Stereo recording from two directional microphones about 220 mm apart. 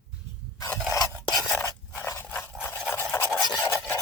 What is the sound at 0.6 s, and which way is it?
Filing, 10° left (ahead or behind).